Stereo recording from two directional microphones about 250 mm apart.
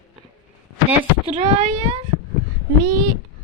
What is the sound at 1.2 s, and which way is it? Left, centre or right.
Speech, right.